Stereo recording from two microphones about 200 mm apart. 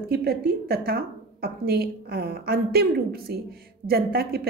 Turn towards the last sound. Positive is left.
turn(degrees=-50)  # may be behind; listen again after turning